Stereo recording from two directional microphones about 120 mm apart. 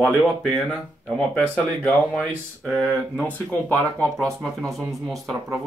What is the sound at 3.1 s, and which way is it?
Speech, 10° left (ahead or behind).